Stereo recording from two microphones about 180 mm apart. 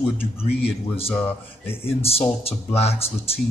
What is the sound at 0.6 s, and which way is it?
Speech, 30° left (ahead or behind).